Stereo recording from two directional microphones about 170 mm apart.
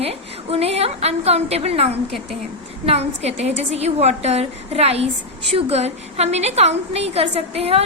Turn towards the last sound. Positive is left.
turn(degrees=-35)  # may be behind; listen again after turning